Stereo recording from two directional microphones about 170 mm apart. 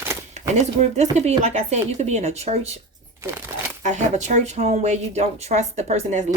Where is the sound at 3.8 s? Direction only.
40° right (ahead or behind).